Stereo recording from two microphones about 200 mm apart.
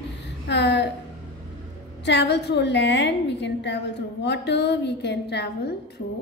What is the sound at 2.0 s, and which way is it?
A woman's voice, 60° left (ahead or behind).